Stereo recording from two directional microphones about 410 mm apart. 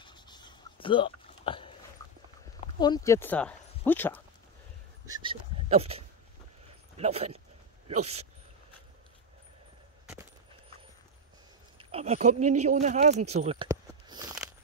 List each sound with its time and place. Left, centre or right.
0.0 s dog: centre
2.6 s speech: centre
5.0 s speech: centre
11.8 s speech: centre